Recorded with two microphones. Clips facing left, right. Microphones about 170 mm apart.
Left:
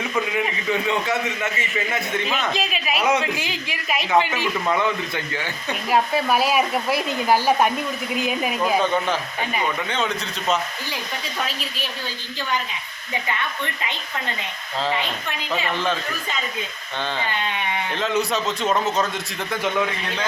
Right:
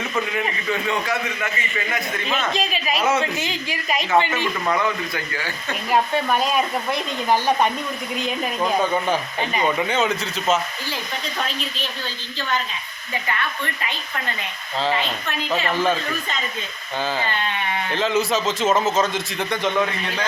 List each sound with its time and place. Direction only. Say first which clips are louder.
0.3 s a man's voice: left 1 dB; 15° left (ahead or behind)
2.2 s a woman's voice: right 1 dB; centre (ahead or behind)
5.1 s a man's voice: left 1 dB; 20° left (ahead or behind)
5.9 s a woman's voice: even; 5° left (ahead or behind)
15.7 s speech: right 4 dB; 10° right (ahead or behind)
17.2 s speech: right 1 dB; 15° left (ahead or behind)
17.9 s a woman's voice: right 3 dB; centre (ahead or behind)